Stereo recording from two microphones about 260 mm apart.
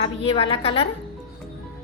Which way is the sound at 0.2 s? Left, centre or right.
Centre.